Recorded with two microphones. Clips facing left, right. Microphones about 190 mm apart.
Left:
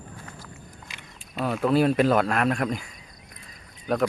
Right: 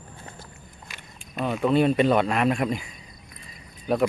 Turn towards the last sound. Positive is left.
turn(degrees=0)  # may be behind; listen again after turning